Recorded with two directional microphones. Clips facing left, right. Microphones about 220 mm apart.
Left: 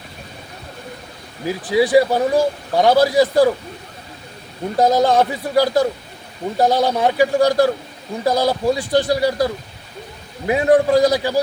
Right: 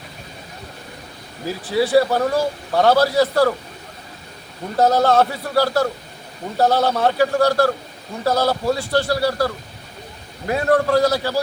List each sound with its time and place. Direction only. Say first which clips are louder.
1.5 s a man's voice: left 3 dB; 15° left (ahead or behind)
4.8 s a man's voice: left 1 dB; 15° left (ahead or behind)